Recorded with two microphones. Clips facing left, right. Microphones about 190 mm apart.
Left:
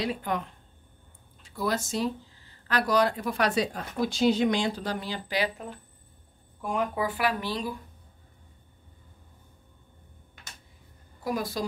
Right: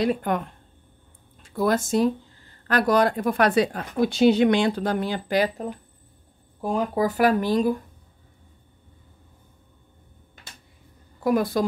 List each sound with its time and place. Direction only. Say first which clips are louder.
0.0 s speech: right 7 dB; 50° right (ahead or behind)
6.6 s speech: right 5 dB; 35° right (ahead or behind)
11.2 s a woman's voice: right 9 dB; 55° right (ahead or behind)